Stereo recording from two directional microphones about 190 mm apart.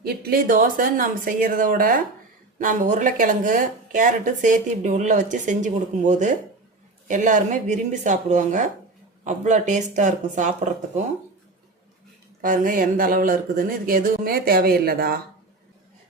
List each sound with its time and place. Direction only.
0.0 s speech: 55° right (ahead or behind)
12.4 s speech: 45° right (ahead or behind)